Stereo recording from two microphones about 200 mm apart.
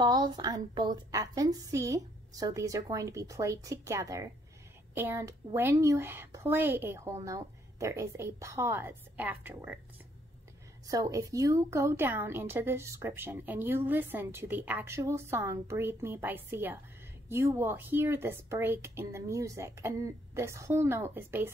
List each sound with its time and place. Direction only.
0.0 s a woman's voice: 20° right (ahead or behind)
10.9 s a woman's voice: 15° right (ahead or behind)